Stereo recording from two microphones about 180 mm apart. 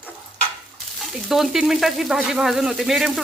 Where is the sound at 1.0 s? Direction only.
Centre (ahead or behind).